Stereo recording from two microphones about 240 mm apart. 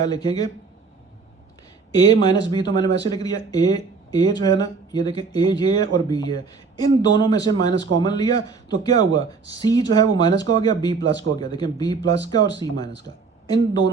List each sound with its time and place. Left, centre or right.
0.1 s speech: centre
1.9 s speech: centre